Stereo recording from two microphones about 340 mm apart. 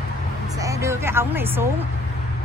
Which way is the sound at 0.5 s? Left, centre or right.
Centre.